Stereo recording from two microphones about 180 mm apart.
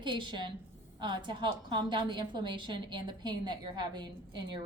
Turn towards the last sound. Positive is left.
turn(degrees=-25)  # may be behind; listen again after turning